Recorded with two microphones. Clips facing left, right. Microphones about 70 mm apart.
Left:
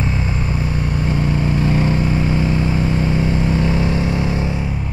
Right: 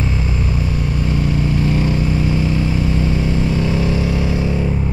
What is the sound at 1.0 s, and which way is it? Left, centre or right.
Vehicle, left.